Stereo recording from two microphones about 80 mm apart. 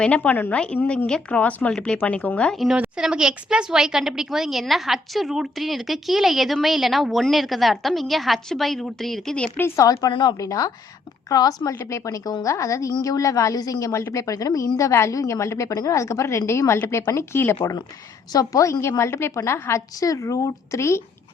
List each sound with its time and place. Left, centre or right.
0.0 s speech: centre
2.7 s a woman's voice: centre
9.6 s a woman's voice: left
9.8 s a woman's voice: left
10.1 s a woman's voice: left
10.3 s a woman's voice: left
11.6 s a woman's voice: left
15.7 s speech: left
16.0 s a woman's voice: left
18.3 s a woman's voice: left
20.0 s a woman's voice: left